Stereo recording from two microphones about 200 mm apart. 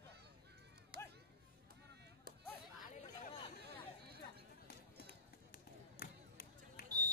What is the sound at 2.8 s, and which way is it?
Chatter, 35° left (ahead or behind).